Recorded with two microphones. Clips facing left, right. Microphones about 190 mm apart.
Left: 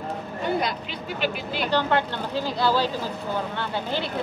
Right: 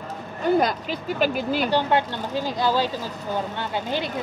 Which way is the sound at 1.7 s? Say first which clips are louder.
Left 3 dB; 15° right (ahead or behind).